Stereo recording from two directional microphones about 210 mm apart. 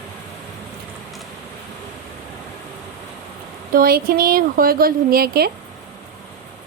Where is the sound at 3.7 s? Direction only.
45° right (ahead or behind).